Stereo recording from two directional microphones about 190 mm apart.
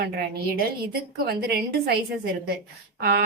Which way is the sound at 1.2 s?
55° right (ahead or behind).